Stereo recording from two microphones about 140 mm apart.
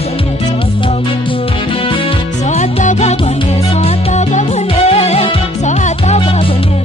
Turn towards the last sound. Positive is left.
turn(degrees=50)  # may be behind; listen again after turning